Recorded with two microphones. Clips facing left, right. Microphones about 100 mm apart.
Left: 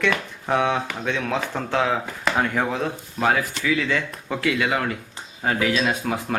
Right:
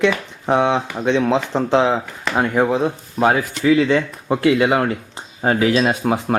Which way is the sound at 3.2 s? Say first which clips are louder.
Right 5 dB; 30° right (ahead or behind).